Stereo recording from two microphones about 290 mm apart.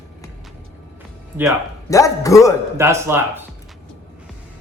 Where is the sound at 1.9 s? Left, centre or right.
Centre.